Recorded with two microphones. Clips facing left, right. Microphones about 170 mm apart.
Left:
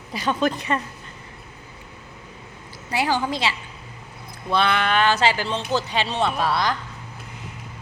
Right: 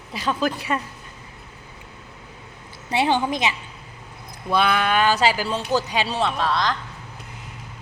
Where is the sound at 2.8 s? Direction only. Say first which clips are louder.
Right 2 dB; 25° right (ahead or behind).